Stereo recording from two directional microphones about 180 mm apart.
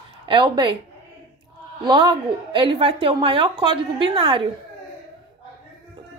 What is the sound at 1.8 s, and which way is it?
A woman's voice, 25° right (ahead or behind).